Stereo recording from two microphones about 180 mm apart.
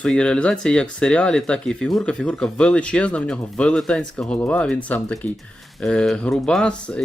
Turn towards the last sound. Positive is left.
turn(degrees=5)  # may be behind; listen again after turning